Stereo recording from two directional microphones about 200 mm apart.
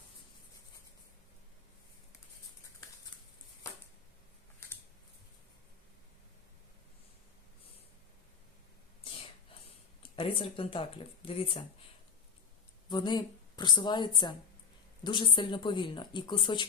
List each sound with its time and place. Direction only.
9.0 s whispering: 25° left (ahead or behind)
10.0 s speech: 25° left (ahead or behind)
12.9 s speech: 20° left (ahead or behind)